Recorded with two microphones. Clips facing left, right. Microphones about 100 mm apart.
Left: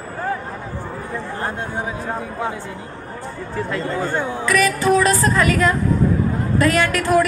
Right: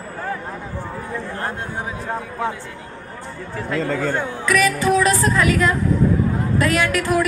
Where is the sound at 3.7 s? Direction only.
90° right.